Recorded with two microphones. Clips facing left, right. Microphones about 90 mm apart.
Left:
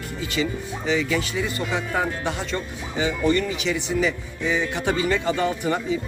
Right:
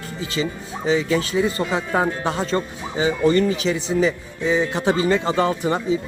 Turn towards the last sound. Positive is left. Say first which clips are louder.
# right 3 dB
turn(degrees=-30)  # may be behind; listen again after turning